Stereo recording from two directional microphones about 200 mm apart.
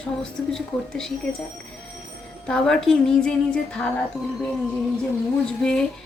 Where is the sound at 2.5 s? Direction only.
5° left (ahead or behind).